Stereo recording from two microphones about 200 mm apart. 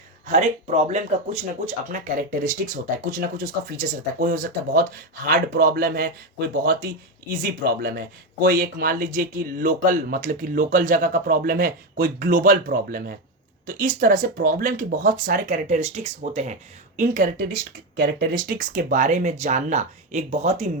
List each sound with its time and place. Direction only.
0.9 s speech: 35° right (ahead or behind)